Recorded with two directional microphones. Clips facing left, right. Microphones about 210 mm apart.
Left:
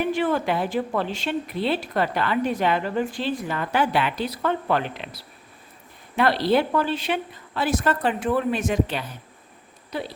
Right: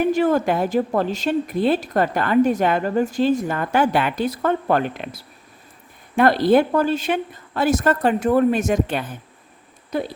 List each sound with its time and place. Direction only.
0.0 s a woman's voice: 40° right (ahead or behind)